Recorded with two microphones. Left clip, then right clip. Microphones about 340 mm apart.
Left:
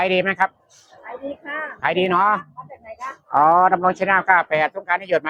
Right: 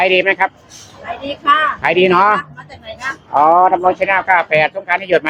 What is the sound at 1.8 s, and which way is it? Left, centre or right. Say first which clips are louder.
Speech: right 4 dB; centre.